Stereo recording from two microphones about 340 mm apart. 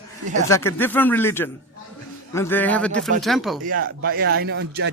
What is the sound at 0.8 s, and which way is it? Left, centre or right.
A man's voice, centre.